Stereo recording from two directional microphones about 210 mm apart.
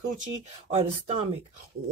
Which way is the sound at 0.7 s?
30° right (ahead or behind).